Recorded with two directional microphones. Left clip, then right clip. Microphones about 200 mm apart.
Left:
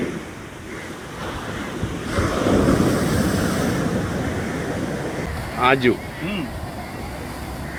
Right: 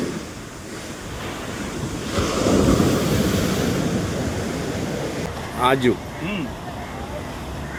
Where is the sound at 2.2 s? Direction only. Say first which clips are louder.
Even; 55° right (ahead or behind).